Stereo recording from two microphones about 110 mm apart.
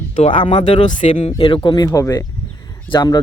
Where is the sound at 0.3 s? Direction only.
50° left (ahead or behind).